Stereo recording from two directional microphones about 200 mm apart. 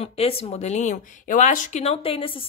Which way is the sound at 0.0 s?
30° left (ahead or behind).